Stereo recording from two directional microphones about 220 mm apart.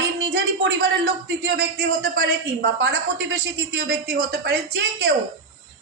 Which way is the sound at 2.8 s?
45° right (ahead or behind).